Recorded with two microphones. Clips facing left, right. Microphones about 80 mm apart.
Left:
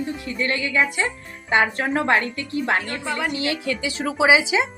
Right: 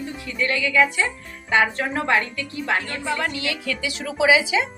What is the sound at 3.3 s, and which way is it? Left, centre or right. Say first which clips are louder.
A woman's voice: left 3 dB; left.